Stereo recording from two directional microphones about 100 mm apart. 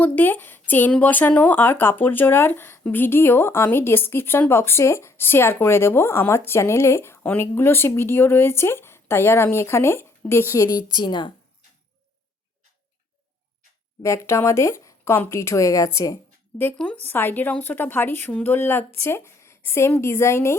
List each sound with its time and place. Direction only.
0.0 s speech: 20° left (ahead or behind)
10.8 s a woman's voice: 45° left (ahead or behind)
14.0 s speech: 30° left (ahead or behind)
16.7 s speech: 15° left (ahead or behind)